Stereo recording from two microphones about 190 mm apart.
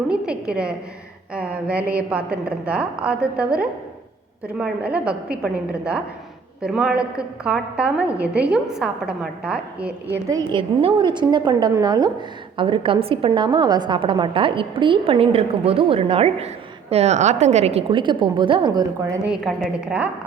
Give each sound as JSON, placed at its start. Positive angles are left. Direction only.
{"t": 0.1, "sound": "a woman's voice", "side_deg": -5}
{"t": 10.2, "sound": "a woman's voice", "side_deg": -20}
{"t": 19.3, "sound": "a woman's voice", "side_deg": -5}